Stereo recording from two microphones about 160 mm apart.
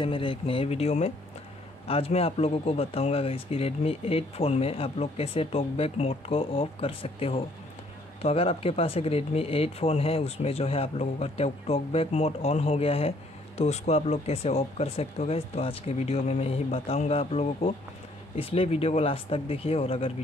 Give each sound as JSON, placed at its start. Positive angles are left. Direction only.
{"t": 0.0, "sound": "speech", "side_deg": 30}